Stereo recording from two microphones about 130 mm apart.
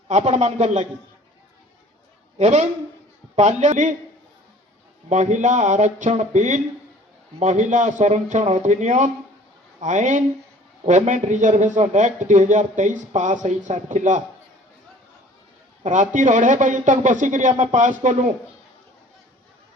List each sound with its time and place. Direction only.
0.1 s a man's voice: 60° right (ahead or behind)
2.4 s a man's voice: 60° right (ahead or behind)
5.0 s a man's voice: 65° right (ahead or behind)
15.8 s a man's voice: 70° right (ahead or behind)